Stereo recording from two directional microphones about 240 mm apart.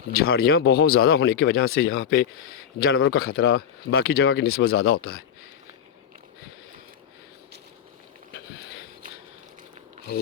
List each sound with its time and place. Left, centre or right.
0.1 s a man's voice: left
4.6 s speech: left
9.0 s a sound: right